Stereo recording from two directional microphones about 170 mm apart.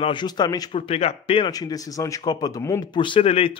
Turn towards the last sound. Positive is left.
turn(degrees=35)  # may be behind; listen again after turning